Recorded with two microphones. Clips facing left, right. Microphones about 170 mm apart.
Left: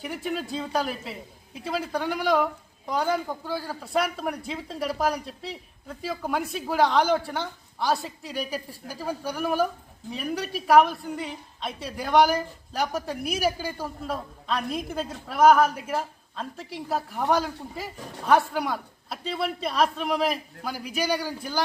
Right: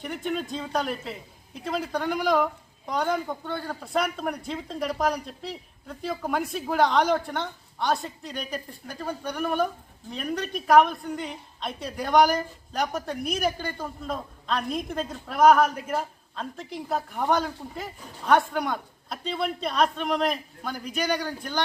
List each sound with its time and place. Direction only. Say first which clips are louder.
0.0 s a woman's voice: right 1 dB; 5° left (ahead or behind)